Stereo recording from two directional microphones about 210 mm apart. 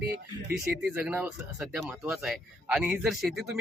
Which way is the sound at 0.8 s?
10° right (ahead or behind).